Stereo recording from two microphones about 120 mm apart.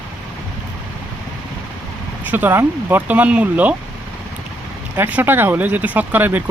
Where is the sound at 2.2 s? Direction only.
15° right (ahead or behind).